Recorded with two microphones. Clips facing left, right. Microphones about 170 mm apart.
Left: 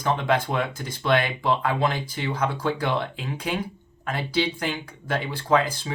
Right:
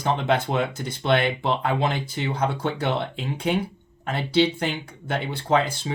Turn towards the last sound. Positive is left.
turn(degrees=-25)  # may be behind; listen again after turning